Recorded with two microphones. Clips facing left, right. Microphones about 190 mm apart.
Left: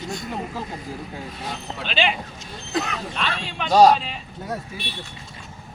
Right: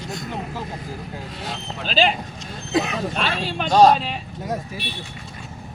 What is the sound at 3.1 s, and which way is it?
Speech, 35° right (ahead or behind).